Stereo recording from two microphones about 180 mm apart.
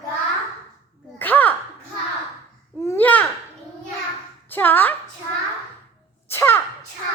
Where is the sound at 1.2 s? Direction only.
10° left (ahead or behind).